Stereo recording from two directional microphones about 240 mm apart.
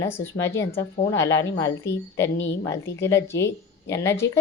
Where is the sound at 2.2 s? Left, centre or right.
Left.